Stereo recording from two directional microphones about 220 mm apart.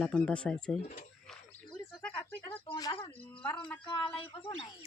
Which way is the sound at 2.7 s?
20° left (ahead or behind).